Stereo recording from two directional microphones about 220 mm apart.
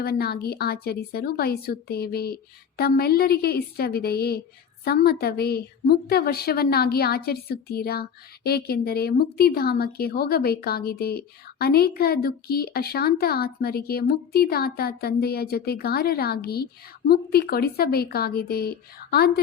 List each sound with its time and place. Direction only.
0.0 s a woman's voice: 45° left (ahead or behind)